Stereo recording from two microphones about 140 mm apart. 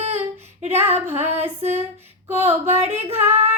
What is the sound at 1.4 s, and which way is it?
Female singing, 50° right (ahead or behind).